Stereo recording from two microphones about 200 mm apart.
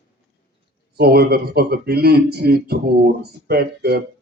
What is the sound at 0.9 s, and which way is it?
Speech, 50° right (ahead or behind).